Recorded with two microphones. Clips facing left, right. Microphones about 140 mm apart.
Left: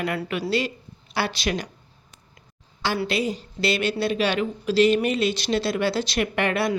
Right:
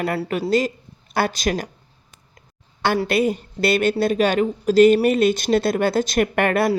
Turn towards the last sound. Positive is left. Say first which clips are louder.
# right 5 dB
turn(degrees=-50)  # may be behind; listen again after turning